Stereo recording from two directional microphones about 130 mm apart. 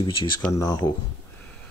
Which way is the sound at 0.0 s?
40° left (ahead or behind).